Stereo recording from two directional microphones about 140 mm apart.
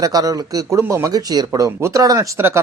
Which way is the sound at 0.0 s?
25° right (ahead or behind).